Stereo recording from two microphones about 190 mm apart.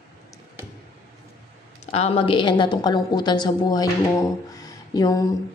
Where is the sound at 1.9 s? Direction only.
30° left (ahead or behind).